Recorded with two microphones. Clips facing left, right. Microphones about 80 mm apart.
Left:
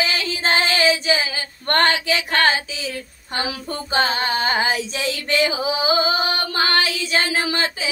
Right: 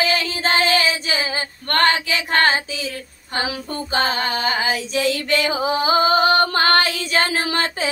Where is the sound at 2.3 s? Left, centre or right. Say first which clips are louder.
Right 2 dB; right.